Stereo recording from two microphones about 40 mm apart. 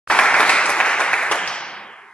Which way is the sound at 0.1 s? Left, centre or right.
Left.